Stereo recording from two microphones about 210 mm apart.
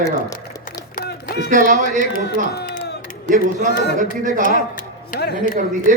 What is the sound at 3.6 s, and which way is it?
Speech, 50° left (ahead or behind).